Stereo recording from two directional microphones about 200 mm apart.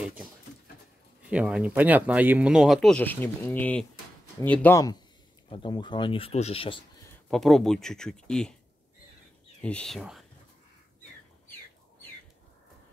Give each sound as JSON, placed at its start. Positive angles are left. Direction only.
{"t": 1.3, "sound": "speech", "side_deg": -5}
{"t": 5.5, "sound": "speech", "side_deg": 25}
{"t": 7.2, "sound": "speech", "side_deg": 0}
{"t": 9.6, "sound": "speech", "side_deg": 5}